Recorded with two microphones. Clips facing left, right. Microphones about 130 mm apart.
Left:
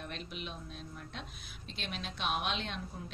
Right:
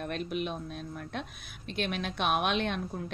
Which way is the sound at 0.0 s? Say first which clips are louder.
Right 10 dB; 55° right (ahead or behind).